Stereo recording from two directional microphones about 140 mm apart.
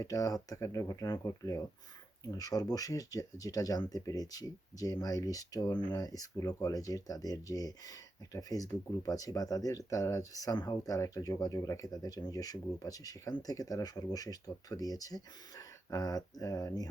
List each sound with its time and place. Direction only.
0.0 s speech: 25° left (ahead or behind)